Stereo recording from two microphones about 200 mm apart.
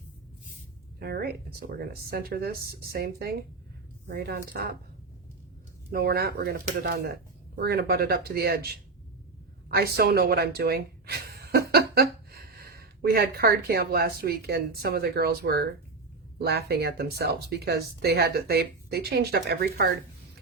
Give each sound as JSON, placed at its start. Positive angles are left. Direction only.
{"t": 0.9, "sound": "speech", "side_deg": -50}
{"t": 5.9, "sound": "speech", "side_deg": -50}